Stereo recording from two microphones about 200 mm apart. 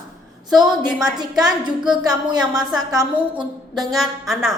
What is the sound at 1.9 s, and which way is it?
A woman's voice, 20° right (ahead or behind).